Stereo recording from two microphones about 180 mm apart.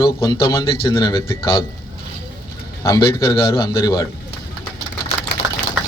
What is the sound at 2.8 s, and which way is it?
A man's voice, 15° left (ahead or behind).